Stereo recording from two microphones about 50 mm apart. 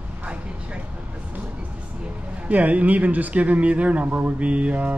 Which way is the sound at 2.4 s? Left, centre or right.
Right.